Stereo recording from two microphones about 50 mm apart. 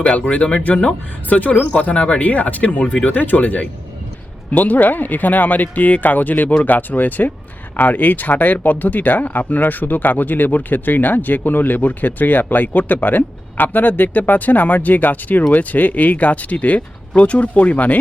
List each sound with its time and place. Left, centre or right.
0.0 s speech: left